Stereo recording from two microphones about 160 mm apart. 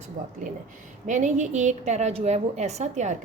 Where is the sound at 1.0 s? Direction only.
50° right (ahead or behind).